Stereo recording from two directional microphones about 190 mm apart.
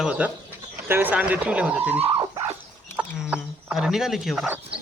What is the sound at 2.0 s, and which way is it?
Dog, 30° right (ahead or behind).